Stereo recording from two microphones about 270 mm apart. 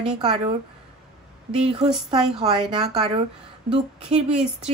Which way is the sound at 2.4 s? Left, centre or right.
Centre.